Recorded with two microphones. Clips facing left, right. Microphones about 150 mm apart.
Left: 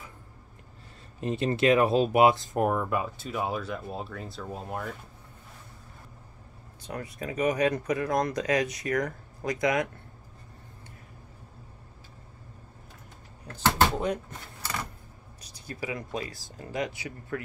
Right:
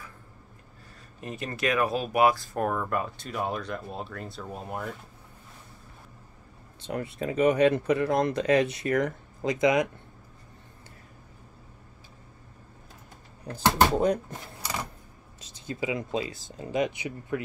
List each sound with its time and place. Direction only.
1.2 s speech: 30° left (ahead or behind); by 4.8 s 5° right (ahead or behind)
6.8 s speech: 25° right (ahead or behind)
13.9 s speech: 40° right (ahead or behind)
15.4 s speech: 25° right (ahead or behind)